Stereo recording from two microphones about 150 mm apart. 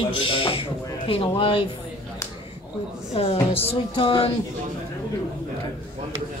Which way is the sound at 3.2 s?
40° left (ahead or behind).